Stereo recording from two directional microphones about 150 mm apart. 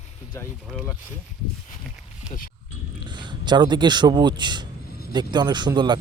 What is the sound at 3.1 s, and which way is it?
Speech, 30° right (ahead or behind).